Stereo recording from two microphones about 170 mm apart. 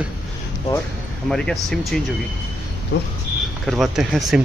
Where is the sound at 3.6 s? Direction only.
Centre (ahead or behind).